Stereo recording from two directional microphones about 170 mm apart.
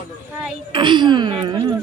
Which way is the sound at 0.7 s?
25° right (ahead or behind).